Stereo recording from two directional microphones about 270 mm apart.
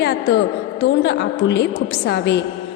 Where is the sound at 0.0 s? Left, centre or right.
Left.